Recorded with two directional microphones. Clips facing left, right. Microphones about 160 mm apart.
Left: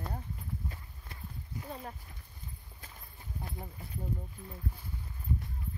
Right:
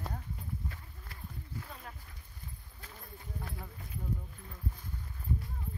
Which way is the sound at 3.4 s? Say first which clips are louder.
Left 2 dB; 20° left (ahead or behind).